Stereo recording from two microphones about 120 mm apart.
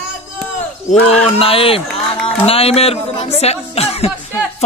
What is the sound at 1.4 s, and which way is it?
A man's voice, 50° left (ahead or behind).